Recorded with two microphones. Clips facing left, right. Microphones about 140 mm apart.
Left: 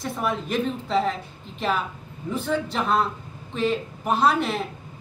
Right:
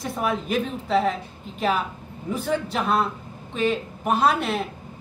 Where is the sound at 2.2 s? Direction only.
5° right (ahead or behind).